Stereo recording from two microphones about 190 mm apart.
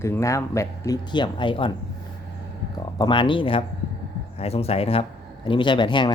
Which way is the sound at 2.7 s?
25° left (ahead or behind).